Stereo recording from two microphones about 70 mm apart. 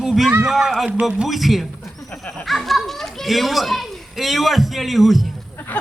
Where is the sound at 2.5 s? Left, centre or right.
Centre.